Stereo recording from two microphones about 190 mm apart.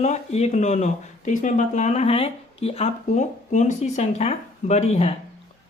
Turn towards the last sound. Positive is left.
turn(degrees=35)  # may be behind; listen again after turning